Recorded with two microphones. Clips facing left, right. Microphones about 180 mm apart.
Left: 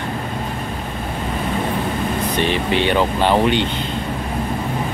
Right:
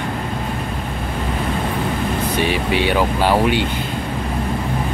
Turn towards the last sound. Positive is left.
turn(degrees=-10)  # may be behind; listen again after turning